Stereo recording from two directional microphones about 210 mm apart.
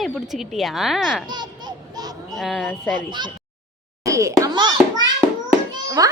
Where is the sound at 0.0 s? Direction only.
Centre (ahead or behind).